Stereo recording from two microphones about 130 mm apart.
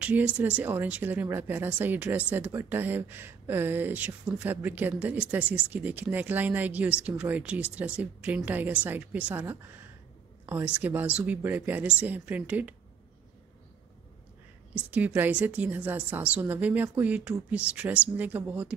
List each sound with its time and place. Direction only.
0.0 s a woman's voice: 10° right (ahead or behind)
14.7 s a woman's voice: 10° right (ahead or behind)